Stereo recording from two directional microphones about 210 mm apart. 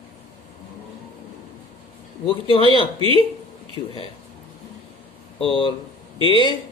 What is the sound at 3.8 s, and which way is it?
Speech, 25° left (ahead or behind).